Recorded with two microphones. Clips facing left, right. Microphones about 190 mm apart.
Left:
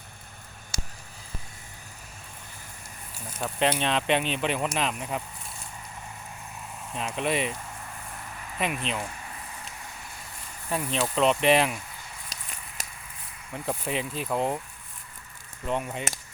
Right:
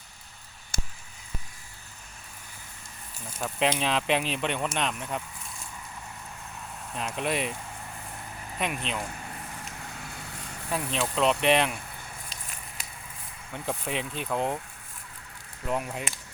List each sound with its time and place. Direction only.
0.7 s a sound: 55° right (ahead or behind)
3.4 s speech: centre (ahead or behind)
6.9 s speech: centre (ahead or behind)
8.5 s speech: centre (ahead or behind)
11.0 s speech: centre (ahead or behind)
12.3 s walk: 40° left (ahead or behind)
13.5 s speech: centre (ahead or behind)
15.6 s speech: centre (ahead or behind)